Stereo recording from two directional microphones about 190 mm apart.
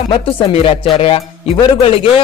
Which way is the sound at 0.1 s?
30° left (ahead or behind).